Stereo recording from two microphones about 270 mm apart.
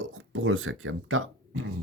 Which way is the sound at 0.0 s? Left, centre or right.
Right.